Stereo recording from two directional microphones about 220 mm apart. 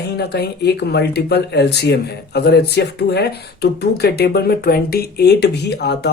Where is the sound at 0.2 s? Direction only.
50° left (ahead or behind).